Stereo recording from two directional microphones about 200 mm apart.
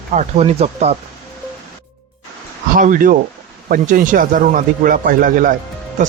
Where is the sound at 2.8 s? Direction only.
40° right (ahead or behind).